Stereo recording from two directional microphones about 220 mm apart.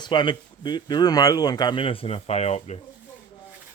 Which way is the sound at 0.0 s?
20° left (ahead or behind).